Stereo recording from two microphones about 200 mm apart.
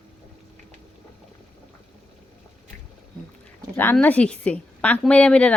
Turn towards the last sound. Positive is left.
turn(degrees=5)  # may be behind; listen again after turning